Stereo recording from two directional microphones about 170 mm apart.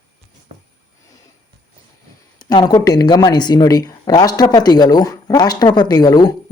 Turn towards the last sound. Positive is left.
turn(degrees=25)  # may be behind; listen again after turning